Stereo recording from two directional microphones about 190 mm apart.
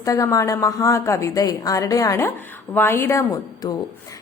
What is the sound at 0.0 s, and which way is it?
A woman's voice, 15° left (ahead or behind).